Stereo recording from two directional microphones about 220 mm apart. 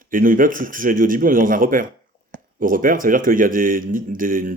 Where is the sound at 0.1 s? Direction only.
40° right (ahead or behind).